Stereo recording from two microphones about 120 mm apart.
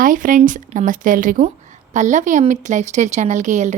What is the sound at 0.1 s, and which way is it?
Speech, 90° right.